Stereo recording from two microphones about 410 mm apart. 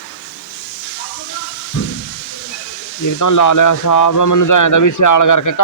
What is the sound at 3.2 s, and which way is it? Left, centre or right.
A man's voice, left.